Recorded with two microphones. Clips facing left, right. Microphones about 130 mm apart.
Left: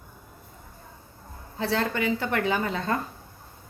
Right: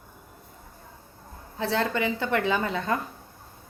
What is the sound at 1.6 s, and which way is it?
A woman's voice, 20° right (ahead or behind).